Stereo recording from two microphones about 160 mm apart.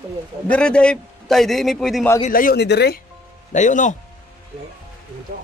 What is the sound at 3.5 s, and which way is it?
Speech, 50° left (ahead or behind).